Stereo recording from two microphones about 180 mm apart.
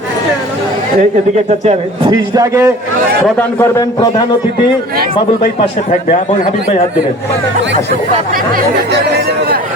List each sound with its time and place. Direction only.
2.0 s a man's voice: 20° right (ahead or behind)
3.3 s a man's voice: 15° left (ahead or behind)
6.1 s a man's voice: 45° left (ahead or behind)
8.3 s speech: 55° right (ahead or behind)